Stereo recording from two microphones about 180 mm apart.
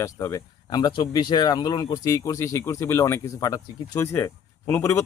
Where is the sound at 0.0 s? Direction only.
15° left (ahead or behind).